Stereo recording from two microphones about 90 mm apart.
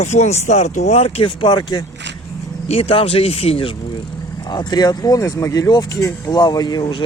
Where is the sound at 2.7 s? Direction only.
90° left.